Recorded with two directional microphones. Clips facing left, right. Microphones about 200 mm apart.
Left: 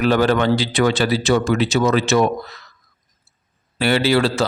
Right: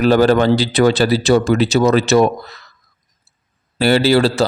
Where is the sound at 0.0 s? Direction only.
35° right (ahead or behind).